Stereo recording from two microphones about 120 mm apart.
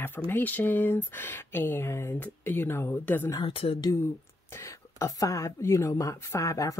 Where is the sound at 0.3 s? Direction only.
15° left (ahead or behind).